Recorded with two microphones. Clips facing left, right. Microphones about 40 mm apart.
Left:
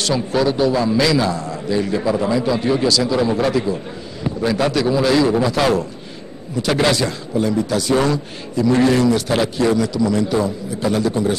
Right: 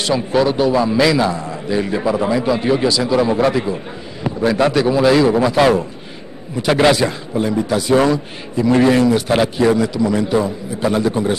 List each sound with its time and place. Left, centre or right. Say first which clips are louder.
0.0 s a man's voice: right 2 dB; centre